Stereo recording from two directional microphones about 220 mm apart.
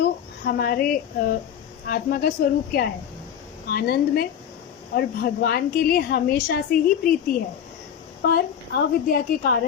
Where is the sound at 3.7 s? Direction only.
45° left (ahead or behind).